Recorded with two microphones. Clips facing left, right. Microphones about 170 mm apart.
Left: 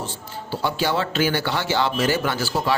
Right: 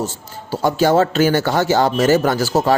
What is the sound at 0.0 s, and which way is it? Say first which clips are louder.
Speech: right 6 dB; 45° right (ahead or behind).